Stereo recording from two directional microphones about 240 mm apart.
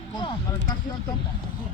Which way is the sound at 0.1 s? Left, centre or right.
Centre.